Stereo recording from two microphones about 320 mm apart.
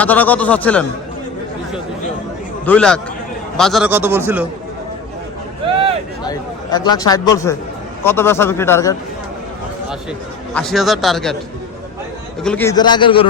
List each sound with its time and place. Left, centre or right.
0.0 s speech: centre
2.6 s speech: centre
6.2 s a man's voice: centre
10.5 s speech: centre
12.4 s a man's voice: centre